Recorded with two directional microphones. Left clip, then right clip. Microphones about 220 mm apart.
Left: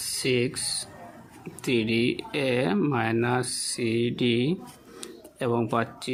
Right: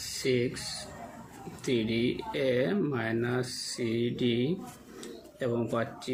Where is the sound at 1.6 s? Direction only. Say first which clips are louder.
Left 5 dB; 50° left (ahead or behind).